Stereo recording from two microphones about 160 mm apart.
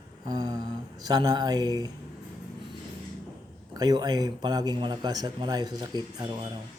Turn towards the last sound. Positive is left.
turn(degrees=-25)  # may be behind; listen again after turning